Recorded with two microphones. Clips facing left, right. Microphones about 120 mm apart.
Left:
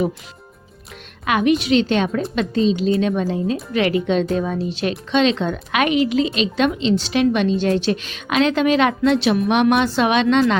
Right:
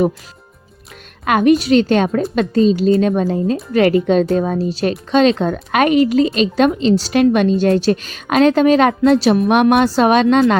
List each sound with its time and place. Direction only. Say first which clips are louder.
1.2 s speech: right 5 dB; 45° right (ahead or behind)